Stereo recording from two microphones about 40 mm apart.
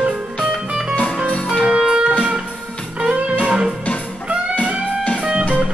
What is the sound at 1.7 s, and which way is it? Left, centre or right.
Music, right.